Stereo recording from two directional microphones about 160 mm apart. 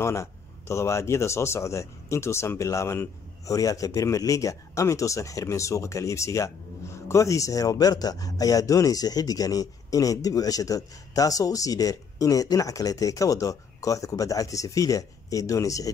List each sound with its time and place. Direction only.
0.0 s speech: 15° left (ahead or behind)